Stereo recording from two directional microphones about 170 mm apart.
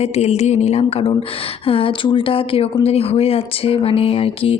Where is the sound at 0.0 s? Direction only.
40° left (ahead or behind).